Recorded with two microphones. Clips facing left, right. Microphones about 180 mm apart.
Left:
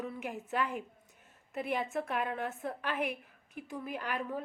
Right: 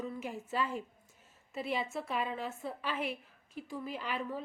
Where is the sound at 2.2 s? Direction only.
60° left (ahead or behind).